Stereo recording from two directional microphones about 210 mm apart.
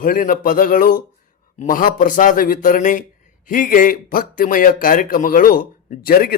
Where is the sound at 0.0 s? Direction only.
40° left (ahead or behind).